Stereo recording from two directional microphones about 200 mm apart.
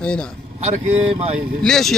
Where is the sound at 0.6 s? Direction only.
35° right (ahead or behind).